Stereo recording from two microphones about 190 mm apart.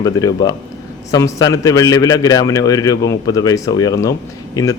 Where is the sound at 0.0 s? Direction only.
20° left (ahead or behind).